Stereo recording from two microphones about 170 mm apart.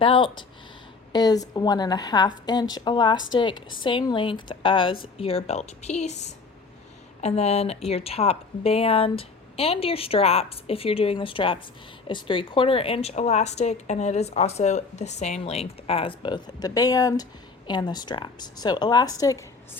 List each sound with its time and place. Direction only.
0.0 s a woman's voice: 30° left (ahead or behind)